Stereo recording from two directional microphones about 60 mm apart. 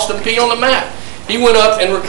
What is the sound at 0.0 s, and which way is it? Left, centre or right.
A man's voice, right.